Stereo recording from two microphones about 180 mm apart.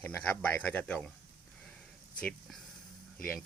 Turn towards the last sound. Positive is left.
turn(degrees=5)  # may be behind; listen again after turning